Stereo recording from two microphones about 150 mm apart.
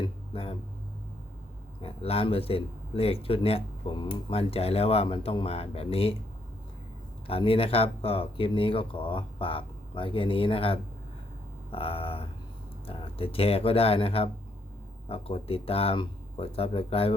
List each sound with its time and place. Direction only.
1.8 s speech: 40° left (ahead or behind)
7.3 s speech: 40° left (ahead or behind)